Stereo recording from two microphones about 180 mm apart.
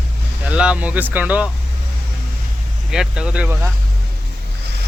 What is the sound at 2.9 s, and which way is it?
Speech, 5° right (ahead or behind).